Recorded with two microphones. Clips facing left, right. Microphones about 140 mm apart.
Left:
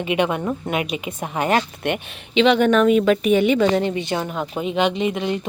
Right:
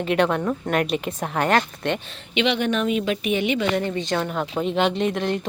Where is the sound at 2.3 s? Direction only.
40° left (ahead or behind).